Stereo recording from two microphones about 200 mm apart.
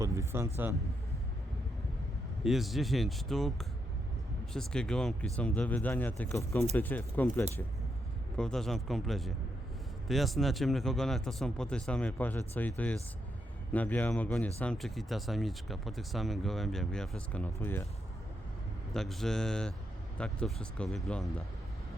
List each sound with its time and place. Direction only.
0.0 s vehicle: 15° right (ahead or behind)
2.4 s speech: centre (ahead or behind)
18.9 s speech: centre (ahead or behind)